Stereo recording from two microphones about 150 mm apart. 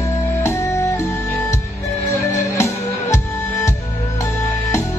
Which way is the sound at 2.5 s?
20° left (ahead or behind).